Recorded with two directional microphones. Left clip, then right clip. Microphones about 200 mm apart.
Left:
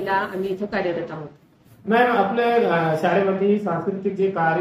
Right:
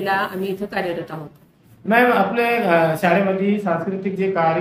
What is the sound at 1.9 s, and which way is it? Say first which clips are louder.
Speech: right 2 dB; 50° right (ahead or behind).